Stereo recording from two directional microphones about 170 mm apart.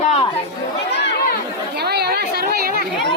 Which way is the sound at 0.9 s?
75° left (ahead or behind).